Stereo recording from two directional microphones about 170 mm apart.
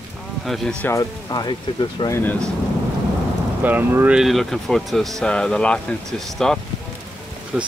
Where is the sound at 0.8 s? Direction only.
20° left (ahead or behind).